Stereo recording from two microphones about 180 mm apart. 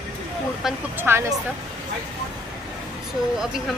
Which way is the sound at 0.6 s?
10° right (ahead or behind).